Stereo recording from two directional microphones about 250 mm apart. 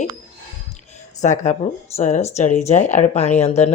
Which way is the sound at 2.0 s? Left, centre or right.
Left.